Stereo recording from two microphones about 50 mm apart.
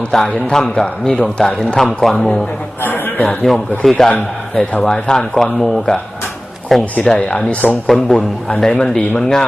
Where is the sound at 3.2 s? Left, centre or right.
Left.